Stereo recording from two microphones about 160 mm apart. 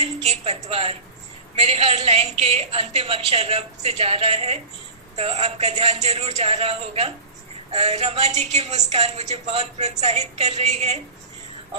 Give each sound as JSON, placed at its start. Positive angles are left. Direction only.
{"t": 0.0, "sound": "a woman's voice", "side_deg": -40}